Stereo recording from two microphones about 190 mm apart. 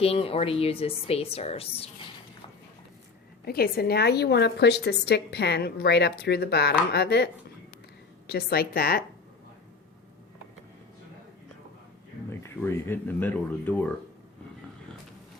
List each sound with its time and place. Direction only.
0.0 s a woman's voice: 30° left (ahead or behind)
3.4 s a woman's voice: 55° left (ahead or behind)
8.3 s a woman's voice: 55° left (ahead or behind)
12.3 s speech: 10° left (ahead or behind)